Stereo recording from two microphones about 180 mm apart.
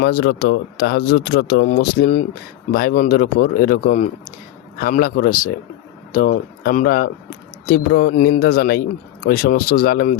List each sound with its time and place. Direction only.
0.0 s speech: 65° left (ahead or behind)